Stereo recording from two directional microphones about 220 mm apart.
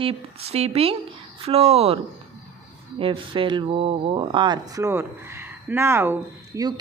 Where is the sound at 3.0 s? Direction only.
25° right (ahead or behind).